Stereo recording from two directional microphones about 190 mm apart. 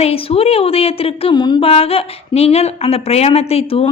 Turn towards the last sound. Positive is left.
turn(degrees=30)  # may be behind; listen again after turning